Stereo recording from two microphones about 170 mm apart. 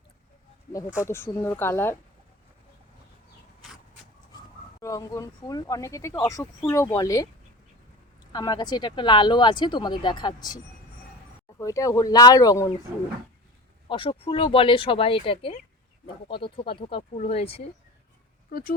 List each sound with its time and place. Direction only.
1.0 s speech: 15° left (ahead or behind)
4.8 s speech: 20° left (ahead or behind)
8.3 s speech: 25° left (ahead or behind)
11.6 s speech: 20° left (ahead or behind)
13.8 s speech: 30° left (ahead or behind)